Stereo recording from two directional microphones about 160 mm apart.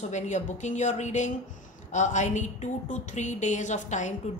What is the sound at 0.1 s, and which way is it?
A woman's voice, 50° left (ahead or behind).